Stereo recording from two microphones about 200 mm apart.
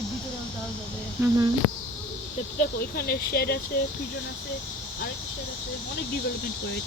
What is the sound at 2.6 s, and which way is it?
Speech, 50° left (ahead or behind).